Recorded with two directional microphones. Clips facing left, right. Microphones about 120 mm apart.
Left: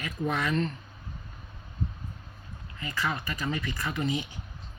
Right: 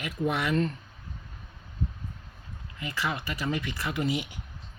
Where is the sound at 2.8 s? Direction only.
15° right (ahead or behind).